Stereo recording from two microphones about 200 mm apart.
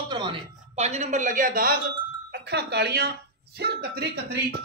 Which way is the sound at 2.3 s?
55° right (ahead or behind).